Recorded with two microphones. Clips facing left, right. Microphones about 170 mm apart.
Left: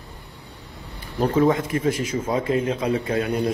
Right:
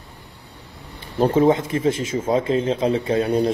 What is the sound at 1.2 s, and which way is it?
Speech, 25° right (ahead or behind).